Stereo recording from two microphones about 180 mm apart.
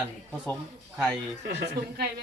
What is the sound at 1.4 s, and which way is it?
Speech, 70° right (ahead or behind).